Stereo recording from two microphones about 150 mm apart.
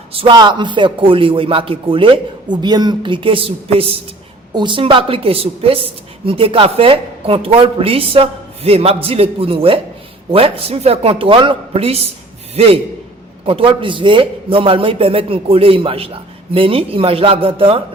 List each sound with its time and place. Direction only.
0.1 s a woman's voice: 35° right (ahead or behind)